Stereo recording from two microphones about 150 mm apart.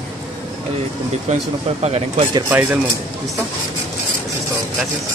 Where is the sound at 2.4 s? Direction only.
15° right (ahead or behind).